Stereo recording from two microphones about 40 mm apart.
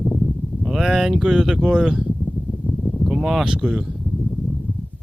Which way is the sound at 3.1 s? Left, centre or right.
Centre.